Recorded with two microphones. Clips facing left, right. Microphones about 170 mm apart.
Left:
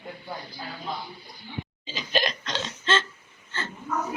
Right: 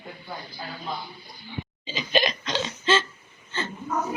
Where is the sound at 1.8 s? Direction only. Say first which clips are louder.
Right 3 dB; centre (ahead or behind).